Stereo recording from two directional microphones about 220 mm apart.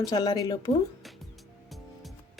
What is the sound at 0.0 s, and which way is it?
Speech, 15° left (ahead or behind).